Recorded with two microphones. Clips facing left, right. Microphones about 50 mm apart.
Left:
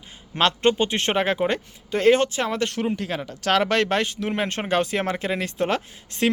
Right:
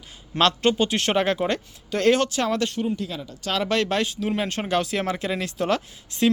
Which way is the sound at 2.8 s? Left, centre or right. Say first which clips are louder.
Left 2 dB; left.